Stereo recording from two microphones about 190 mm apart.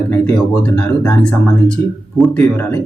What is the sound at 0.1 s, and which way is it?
Speech, 5° left (ahead or behind).